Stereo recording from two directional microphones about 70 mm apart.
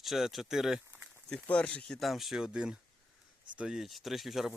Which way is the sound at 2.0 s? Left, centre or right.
Centre.